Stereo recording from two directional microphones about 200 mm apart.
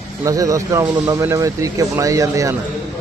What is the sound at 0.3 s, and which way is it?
A man's voice, 15° right (ahead or behind).